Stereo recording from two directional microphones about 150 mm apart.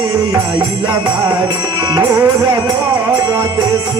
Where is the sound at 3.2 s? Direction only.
25° right (ahead or behind).